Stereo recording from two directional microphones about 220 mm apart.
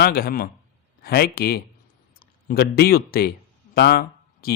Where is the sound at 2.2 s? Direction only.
45° left (ahead or behind).